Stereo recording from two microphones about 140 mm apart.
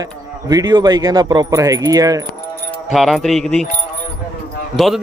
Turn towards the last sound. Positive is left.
turn(degrees=0)  # may be behind; listen again after turning